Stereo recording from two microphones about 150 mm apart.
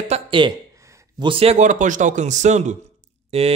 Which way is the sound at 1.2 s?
40° right (ahead or behind).